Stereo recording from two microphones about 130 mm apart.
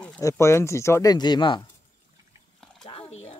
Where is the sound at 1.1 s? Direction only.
35° left (ahead or behind).